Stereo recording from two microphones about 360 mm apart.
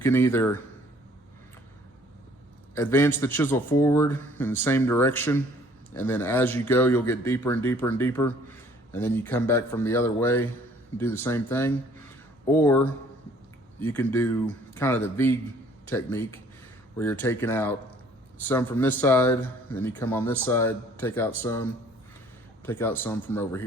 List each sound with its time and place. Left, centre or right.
0.0 s a man's voice: centre
2.7 s a man's voice: centre